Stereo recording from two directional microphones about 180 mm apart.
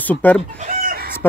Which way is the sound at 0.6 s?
50° right (ahead or behind).